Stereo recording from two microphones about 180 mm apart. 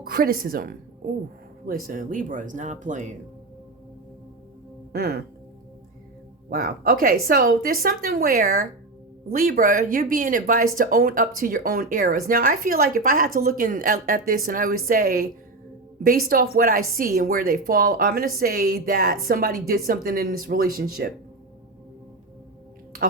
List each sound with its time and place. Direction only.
0.1 s speech: 55° right (ahead or behind)
4.9 s speech: 60° right (ahead or behind)
6.5 s speech: 50° right (ahead or behind)